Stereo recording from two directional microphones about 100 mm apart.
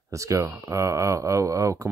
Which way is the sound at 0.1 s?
30° right (ahead or behind).